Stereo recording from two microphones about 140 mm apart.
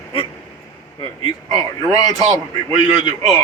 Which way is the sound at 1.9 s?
25° left (ahead or behind).